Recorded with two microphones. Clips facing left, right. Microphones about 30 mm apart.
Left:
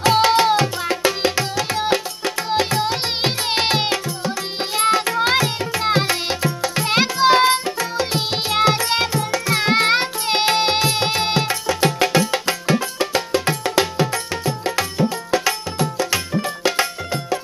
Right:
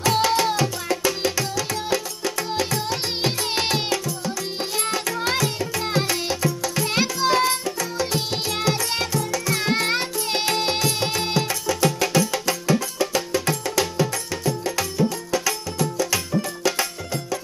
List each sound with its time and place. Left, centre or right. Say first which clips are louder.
0.0 s tabla: left 5 dB; left
4.7 s music: left 10 dB; left